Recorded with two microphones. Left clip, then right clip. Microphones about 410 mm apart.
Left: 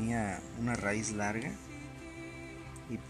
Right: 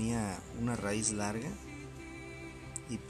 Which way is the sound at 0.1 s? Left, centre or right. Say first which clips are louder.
Left 2 dB; centre.